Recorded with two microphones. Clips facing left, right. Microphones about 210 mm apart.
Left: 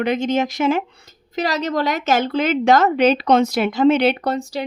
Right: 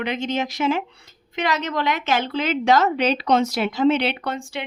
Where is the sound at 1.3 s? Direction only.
35° left (ahead or behind).